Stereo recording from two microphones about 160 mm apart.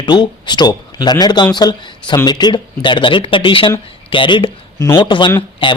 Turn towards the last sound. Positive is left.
turn(degrees=35)  # may be behind; listen again after turning